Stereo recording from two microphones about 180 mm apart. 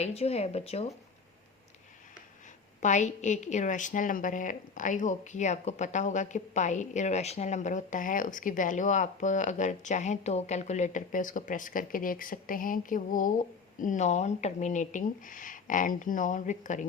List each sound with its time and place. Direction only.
0.0 s a woman's voice: 35° left (ahead or behind)
2.8 s a woman's voice: 40° left (ahead or behind)